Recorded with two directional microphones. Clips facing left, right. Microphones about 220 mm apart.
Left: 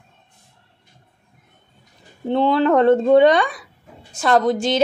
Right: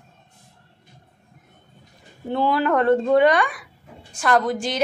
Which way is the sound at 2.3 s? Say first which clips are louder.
Left 4 dB; 25° left (ahead or behind).